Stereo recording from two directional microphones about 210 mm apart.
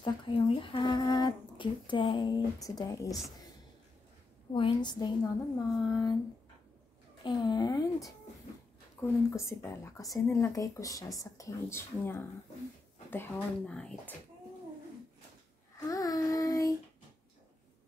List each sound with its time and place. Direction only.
0.0 s speech: 25° left (ahead or behind)
4.5 s speech: 20° left (ahead or behind)
7.2 s speech: 20° left (ahead or behind); by 14.1 s 5° left (ahead or behind)
15.9 s child singing: 15° left (ahead or behind)